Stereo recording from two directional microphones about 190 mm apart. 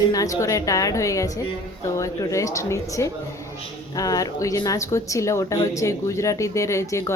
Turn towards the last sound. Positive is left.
turn(degrees=15)  # may be behind; listen again after turning